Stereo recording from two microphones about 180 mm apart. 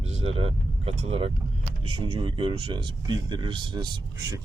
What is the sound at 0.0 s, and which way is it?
Speech, 35° right (ahead or behind).